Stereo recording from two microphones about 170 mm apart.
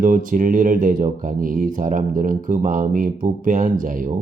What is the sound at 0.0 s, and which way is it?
Speech, 50° right (ahead or behind).